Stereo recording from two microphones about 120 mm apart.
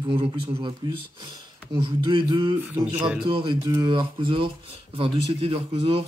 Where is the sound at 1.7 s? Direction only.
40° right (ahead or behind).